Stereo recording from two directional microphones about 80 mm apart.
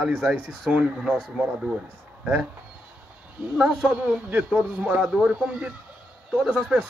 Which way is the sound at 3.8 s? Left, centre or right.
Right.